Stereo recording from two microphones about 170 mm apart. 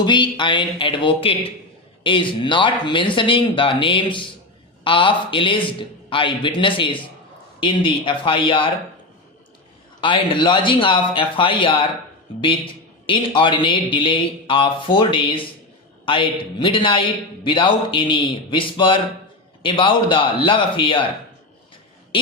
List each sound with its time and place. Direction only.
0.0 s a man's voice: 25° left (ahead or behind)
10.0 s a man's voice: 30° left (ahead or behind)